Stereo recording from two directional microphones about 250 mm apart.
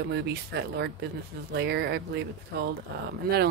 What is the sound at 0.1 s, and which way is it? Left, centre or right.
Speech, right.